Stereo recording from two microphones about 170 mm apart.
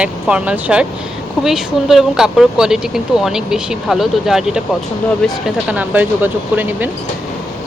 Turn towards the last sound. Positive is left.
turn(degrees=-10)  # may be behind; listen again after turning